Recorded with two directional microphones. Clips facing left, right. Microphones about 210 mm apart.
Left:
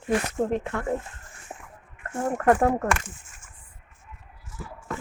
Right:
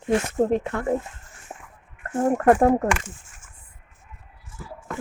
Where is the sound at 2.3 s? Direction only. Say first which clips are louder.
Right 3 dB; 30° right (ahead or behind).